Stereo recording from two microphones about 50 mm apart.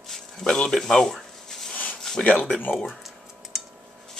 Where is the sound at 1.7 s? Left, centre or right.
Left.